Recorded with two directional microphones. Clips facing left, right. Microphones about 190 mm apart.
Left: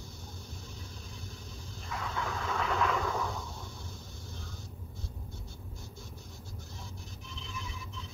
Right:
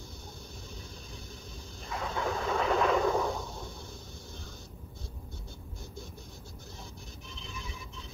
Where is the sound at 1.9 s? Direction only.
30° right (ahead or behind).